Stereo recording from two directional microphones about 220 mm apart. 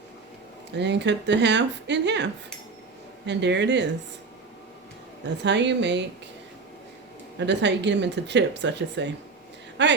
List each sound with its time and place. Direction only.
0.8 s speech: 50° right (ahead or behind)
5.4 s speech: 55° right (ahead or behind)
7.3 s speech: 55° right (ahead or behind)